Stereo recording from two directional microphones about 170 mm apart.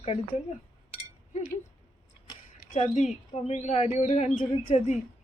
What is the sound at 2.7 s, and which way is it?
Speech, 40° left (ahead or behind).